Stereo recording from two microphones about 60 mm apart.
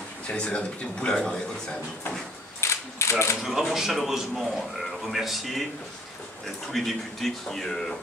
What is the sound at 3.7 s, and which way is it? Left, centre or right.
A man's voice, centre.